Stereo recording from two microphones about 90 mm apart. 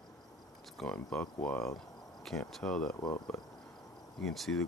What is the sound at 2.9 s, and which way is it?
Speech, 45° left (ahead or behind).